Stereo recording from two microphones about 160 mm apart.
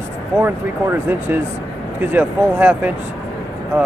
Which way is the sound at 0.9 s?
15° right (ahead or behind).